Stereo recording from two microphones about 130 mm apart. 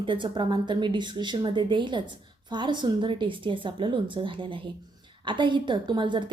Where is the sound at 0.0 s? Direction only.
40° right (ahead or behind).